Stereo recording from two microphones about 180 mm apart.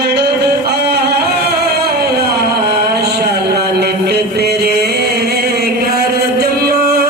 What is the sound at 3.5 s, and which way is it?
Music, 65° right (ahead or behind).